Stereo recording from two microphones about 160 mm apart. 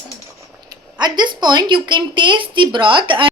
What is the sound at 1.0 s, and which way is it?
A woman's voice, 25° right (ahead or behind).